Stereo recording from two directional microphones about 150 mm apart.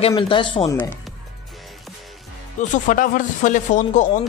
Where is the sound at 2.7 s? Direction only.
60° left (ahead or behind).